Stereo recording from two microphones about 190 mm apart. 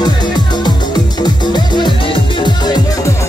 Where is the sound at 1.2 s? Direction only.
25° left (ahead or behind).